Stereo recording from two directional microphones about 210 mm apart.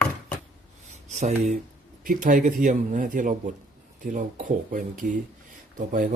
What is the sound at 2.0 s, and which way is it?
Speech, 40° right (ahead or behind).